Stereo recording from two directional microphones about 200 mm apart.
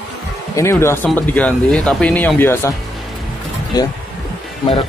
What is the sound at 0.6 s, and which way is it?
Speech, 15° left (ahead or behind).